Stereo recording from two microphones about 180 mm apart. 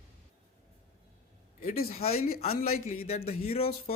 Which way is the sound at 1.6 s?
50° left (ahead or behind).